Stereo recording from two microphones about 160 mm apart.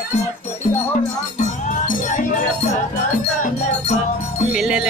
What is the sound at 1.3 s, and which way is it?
Music, 55° left (ahead or behind).